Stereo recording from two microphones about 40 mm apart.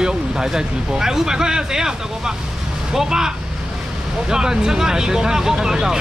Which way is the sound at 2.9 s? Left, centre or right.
Centre.